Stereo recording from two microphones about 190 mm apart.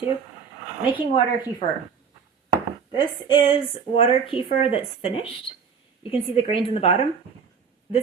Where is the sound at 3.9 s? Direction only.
30° left (ahead or behind).